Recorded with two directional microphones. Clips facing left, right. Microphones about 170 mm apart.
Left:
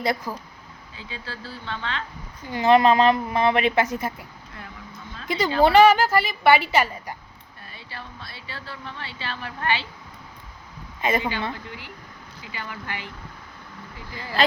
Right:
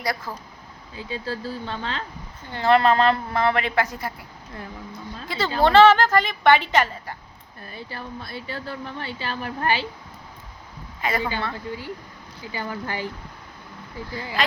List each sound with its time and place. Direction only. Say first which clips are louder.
0.3 s a woman's voice: left 2 dB; 15° left (ahead or behind)
0.9 s speech: right 8 dB; 40° right (ahead or behind)
2.5 s a woman's voice: left 1 dB; 15° left (ahead or behind)
5.3 s a woman's voice: left 1 dB; 20° left (ahead or behind)
7.6 s speech: right 5 dB; 45° right (ahead or behind)
11.0 s a woman's voice: left 1 dB; 20° left (ahead or behind)
12.5 s speech: right 5 dB; 35° right (ahead or behind)